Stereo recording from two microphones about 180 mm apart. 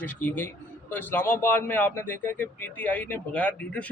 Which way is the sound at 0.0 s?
10° left (ahead or behind).